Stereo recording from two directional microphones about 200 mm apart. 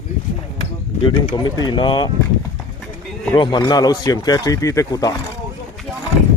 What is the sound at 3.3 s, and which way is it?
Speech, 20° left (ahead or behind).